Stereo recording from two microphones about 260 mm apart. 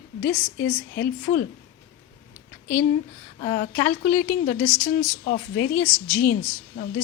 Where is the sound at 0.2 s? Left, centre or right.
Left.